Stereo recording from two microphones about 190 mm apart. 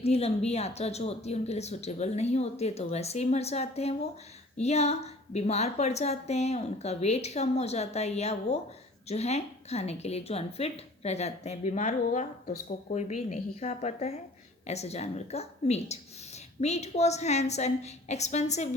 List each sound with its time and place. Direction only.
0.0 s a woman's voice: 35° left (ahead or behind)